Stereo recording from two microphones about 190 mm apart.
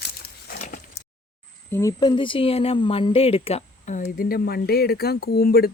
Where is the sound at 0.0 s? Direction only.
55° left (ahead or behind).